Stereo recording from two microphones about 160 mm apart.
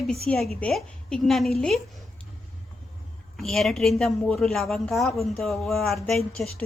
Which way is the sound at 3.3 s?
Centre (ahead or behind).